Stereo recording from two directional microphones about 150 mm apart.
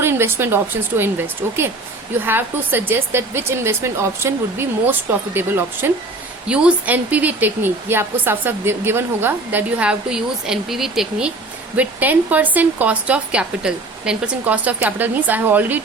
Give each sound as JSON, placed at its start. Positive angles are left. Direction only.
{"t": 0.0, "sound": "a woman's voice", "side_deg": -15}
{"t": 2.2, "sound": "a woman's voice", "side_deg": -15}